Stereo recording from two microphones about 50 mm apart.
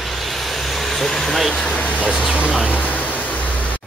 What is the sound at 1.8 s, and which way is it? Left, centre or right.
Speech, left.